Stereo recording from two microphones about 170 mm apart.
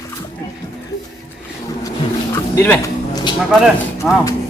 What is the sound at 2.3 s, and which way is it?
Music, 15° left (ahead or behind).